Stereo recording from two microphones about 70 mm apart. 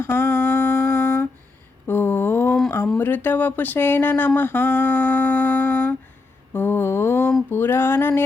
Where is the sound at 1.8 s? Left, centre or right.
Left.